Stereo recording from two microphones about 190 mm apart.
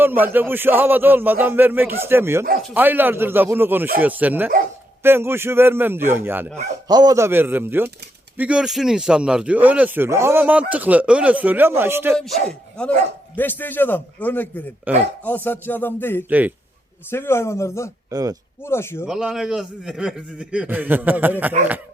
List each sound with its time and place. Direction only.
0.0 s speech: 10° right (ahead or behind)
6.8 s speech: 20° right (ahead or behind)
12.1 s a man's voice: 5° left (ahead or behind)
14.9 s speech: 10° right (ahead or behind)
15.2 s a man's voice: 10° left (ahead or behind)
18.1 s speech: 20° right (ahead or behind)
18.6 s a man's voice: 15° left (ahead or behind)
19.0 s a man's voice: 5° right (ahead or behind)